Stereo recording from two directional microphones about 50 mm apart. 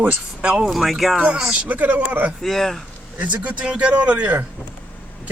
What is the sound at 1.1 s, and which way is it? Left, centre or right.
A man's voice, right.